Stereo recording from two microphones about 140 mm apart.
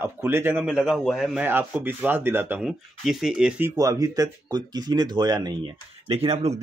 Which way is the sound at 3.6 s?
20° right (ahead or behind).